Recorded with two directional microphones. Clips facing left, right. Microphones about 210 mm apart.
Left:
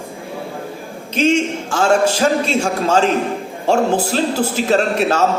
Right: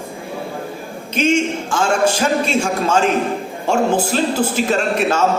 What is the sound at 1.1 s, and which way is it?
Music, 35° left (ahead or behind).